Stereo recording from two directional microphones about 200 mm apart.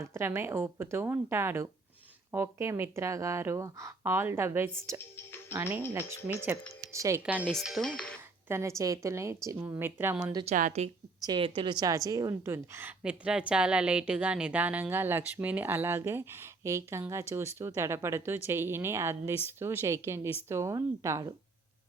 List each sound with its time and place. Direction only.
0.0 s a woman's voice: 15° right (ahead or behind); by 8.2 s 5° left (ahead or behind)
8.4 s a woman's voice: 15° right (ahead or behind)
10.4 s a woman's voice: 35° right (ahead or behind)
11.2 s a woman's voice: 25° right (ahead or behind)